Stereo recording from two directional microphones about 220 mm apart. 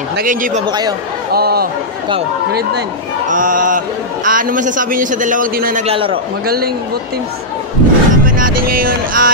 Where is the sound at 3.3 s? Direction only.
35° right (ahead or behind).